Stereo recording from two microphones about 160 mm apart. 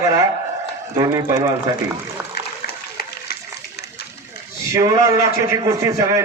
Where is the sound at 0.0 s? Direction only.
20° right (ahead or behind).